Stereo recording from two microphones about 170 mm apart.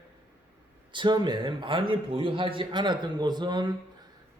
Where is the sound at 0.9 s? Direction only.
25° right (ahead or behind).